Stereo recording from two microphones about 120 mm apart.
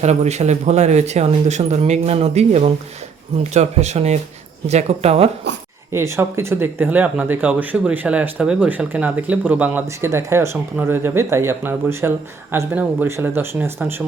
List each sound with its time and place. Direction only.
0.0 s speech: 65° right (ahead or behind)
5.9 s speech: 20° right (ahead or behind)